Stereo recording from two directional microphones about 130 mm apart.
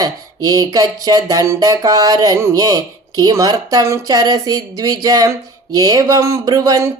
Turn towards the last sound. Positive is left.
turn(degrees=-25)  # may be behind; listen again after turning